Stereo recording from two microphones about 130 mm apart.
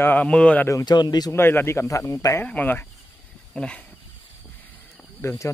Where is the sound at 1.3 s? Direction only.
15° left (ahead or behind).